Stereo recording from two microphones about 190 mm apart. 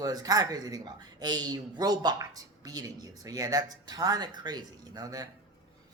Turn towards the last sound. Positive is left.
turn(degrees=-20)  # may be behind; listen again after turning